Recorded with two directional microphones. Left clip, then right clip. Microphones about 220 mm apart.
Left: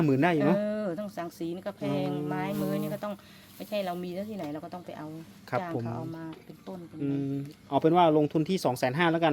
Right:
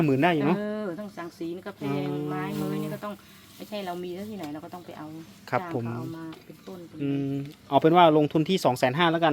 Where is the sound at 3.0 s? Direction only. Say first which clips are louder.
Even; 45° left (ahead or behind).